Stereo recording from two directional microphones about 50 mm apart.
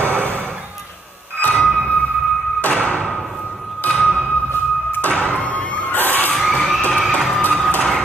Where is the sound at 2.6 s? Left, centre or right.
Left.